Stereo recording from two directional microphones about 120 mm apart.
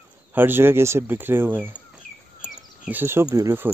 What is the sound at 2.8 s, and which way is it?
Speech, 15° right (ahead or behind).